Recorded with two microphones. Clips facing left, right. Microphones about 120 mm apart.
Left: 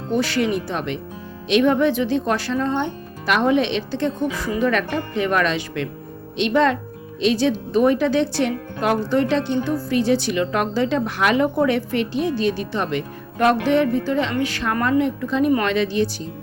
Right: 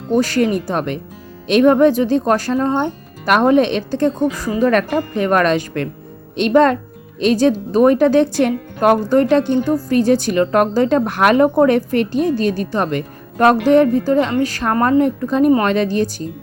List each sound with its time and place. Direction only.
0.1 s speech: 45° right (ahead or behind)